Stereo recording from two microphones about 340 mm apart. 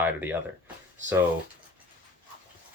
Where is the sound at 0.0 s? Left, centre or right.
Centre.